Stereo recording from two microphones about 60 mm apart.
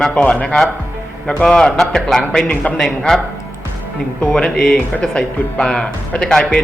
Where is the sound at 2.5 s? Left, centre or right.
Left.